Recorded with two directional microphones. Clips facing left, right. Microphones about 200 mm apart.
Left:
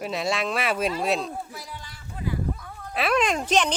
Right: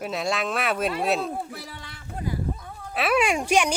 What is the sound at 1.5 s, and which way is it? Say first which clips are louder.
Speech: right 1 dB; 65° right (ahead or behind).